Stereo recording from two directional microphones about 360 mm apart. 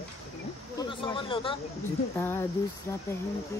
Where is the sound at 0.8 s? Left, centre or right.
Centre.